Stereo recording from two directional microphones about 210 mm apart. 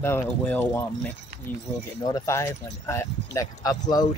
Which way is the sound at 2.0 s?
15° left (ahead or behind).